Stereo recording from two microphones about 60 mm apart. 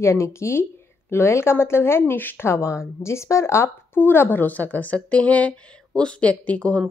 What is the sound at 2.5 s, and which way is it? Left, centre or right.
Speech, left.